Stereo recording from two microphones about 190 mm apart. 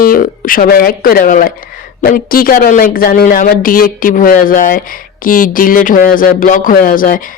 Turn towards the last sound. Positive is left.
turn(degrees=45)  # may be behind; listen again after turning